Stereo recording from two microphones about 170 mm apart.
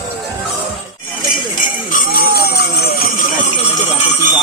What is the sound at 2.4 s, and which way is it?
Vehicle, 70° left (ahead or behind).